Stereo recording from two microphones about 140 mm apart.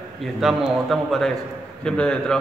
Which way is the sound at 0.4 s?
Centre (ahead or behind).